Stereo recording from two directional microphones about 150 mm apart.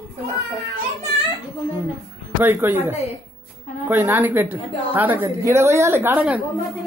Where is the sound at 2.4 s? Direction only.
15° right (ahead or behind).